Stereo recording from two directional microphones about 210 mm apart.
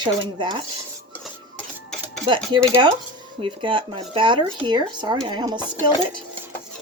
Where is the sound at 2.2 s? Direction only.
25° right (ahead or behind).